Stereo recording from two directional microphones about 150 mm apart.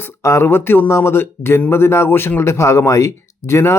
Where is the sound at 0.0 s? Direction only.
20° left (ahead or behind).